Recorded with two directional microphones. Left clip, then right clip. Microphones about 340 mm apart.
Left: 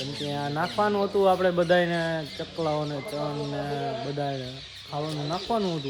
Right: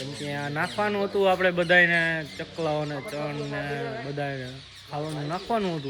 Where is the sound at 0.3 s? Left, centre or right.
Centre.